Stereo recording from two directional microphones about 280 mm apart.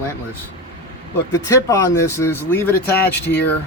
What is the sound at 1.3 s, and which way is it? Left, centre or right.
Speech, centre.